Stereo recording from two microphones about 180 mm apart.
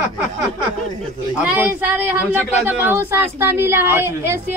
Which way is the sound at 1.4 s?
10° right (ahead or behind).